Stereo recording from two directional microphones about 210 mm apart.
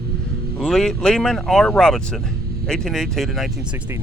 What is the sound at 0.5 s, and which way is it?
Speech, centre (ahead or behind).